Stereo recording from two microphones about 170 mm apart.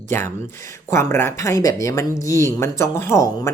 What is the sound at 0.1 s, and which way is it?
Speech, 15° left (ahead or behind).